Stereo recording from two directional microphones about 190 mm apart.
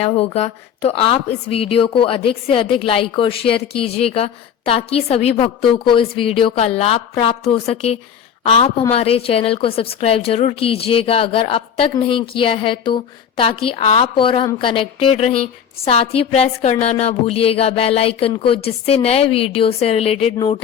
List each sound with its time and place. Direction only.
0.0 s a woman's voice: 35° left (ahead or behind)